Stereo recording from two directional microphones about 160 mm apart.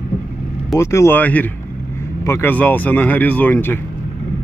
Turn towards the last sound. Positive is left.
turn(degrees=15)  # may be behind; listen again after turning